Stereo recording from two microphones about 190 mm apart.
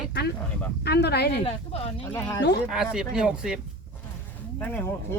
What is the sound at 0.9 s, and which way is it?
Speech, 60° left (ahead or behind).